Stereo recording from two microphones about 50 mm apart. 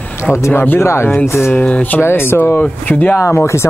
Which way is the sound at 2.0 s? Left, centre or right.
Left.